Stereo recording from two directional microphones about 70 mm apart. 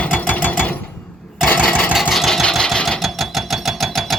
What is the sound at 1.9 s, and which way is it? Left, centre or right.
Sewing machine, centre.